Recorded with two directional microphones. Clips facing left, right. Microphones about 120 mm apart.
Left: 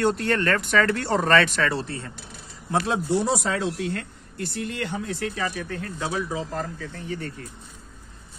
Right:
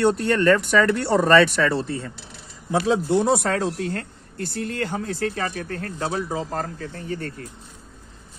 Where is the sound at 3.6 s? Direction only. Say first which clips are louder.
Right 1 dB; 40° right (ahead or behind).